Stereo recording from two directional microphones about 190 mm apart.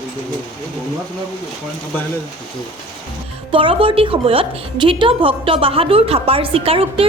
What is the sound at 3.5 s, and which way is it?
A woman's voice, 30° right (ahead or behind).